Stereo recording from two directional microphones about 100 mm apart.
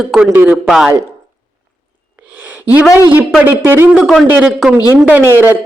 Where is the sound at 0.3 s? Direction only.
15° right (ahead or behind).